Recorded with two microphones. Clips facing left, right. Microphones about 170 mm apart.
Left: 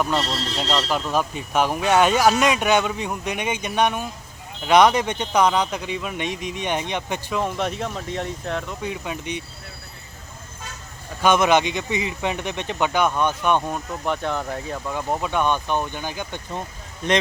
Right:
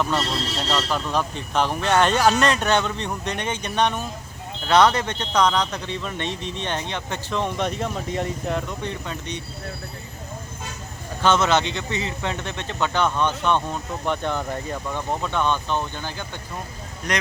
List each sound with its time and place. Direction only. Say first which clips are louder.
0.0 s speech: left 1 dB; 15° left (ahead or behind); by 8.7 s centre (ahead or behind)
8.8 s speech: left 1 dB; 10° left (ahead or behind)
11.2 s speech: left 2 dB; 15° left (ahead or behind)